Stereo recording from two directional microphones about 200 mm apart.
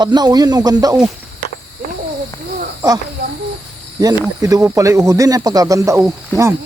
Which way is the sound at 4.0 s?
20° right (ahead or behind).